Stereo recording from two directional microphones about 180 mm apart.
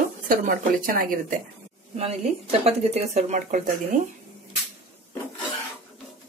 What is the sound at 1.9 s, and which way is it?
Speech, 35° right (ahead or behind).